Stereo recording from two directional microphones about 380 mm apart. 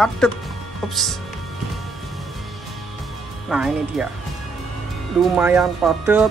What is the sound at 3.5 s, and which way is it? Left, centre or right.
Speech, centre.